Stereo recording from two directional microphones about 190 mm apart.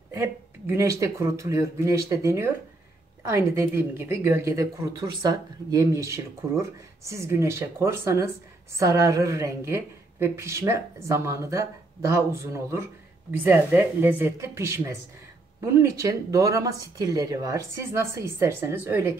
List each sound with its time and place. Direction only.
0.1 s speech: 15° right (ahead or behind)